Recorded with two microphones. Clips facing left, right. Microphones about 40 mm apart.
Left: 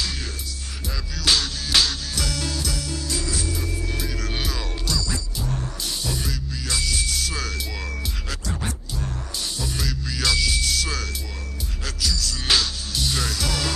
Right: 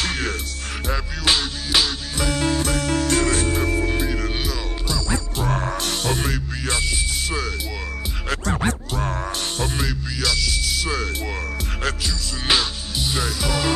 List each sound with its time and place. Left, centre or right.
0.0 s music: right
1.2 s music: right
2.2 s music: right
3.9 s music: right
4.3 s music: centre
4.8 s music: right
5.4 s music: right
6.8 s music: right
8.3 s music: right
10.1 s music: centre
10.7 s music: centre
12.0 s music: right